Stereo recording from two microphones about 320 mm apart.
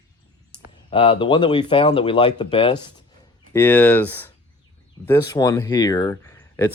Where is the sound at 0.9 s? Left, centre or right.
Centre.